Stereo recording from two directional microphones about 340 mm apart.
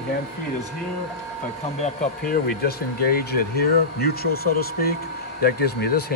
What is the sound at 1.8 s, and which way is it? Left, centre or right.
Speech, left.